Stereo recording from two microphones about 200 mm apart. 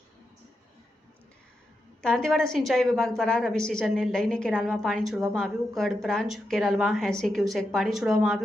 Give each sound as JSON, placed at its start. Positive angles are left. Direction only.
{"t": 2.0, "sound": "a woman's voice", "side_deg": 5}